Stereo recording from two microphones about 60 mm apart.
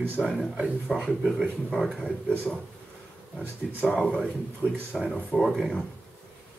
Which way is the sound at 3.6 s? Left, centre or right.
Centre.